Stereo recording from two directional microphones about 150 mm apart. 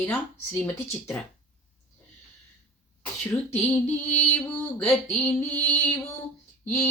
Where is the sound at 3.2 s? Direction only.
10° left (ahead or behind).